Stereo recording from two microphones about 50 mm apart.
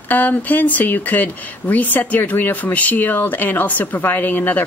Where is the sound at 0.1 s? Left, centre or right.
Left.